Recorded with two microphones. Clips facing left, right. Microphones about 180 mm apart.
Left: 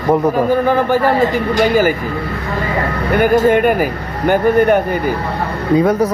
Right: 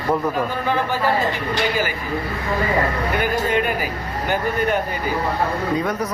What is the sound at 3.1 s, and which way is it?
Speech, 50° left (ahead or behind).